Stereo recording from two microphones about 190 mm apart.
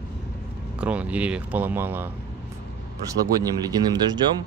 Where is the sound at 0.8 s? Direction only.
5° right (ahead or behind); by 4.2 s 20° right (ahead or behind).